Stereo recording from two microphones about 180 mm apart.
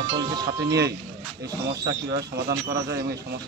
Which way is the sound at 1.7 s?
65° right (ahead or behind).